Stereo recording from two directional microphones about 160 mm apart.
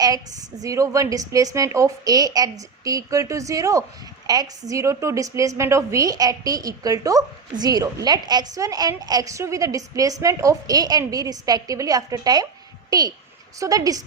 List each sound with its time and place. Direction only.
0.6 s a woman's voice: 20° right (ahead or behind)